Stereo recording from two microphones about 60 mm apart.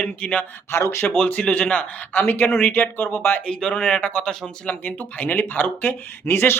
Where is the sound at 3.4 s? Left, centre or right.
Centre; by 6.6 s left.